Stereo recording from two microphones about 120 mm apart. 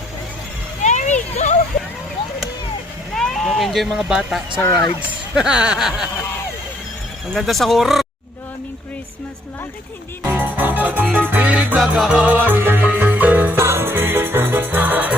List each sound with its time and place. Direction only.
0.8 s a sound: 85° left
3.2 s speech: 5° left (ahead or behind)
7.3 s speech: centre (ahead or behind)
10.2 s speech: 15° right (ahead or behind)
12.3 s music: 15° right (ahead or behind)